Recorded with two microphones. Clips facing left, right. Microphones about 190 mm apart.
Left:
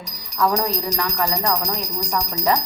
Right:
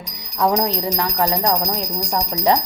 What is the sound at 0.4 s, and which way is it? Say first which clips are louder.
Speech: right 2 dB; 20° right (ahead or behind).